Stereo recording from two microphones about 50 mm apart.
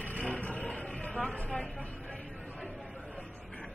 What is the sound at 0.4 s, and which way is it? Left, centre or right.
Roaring cats, left.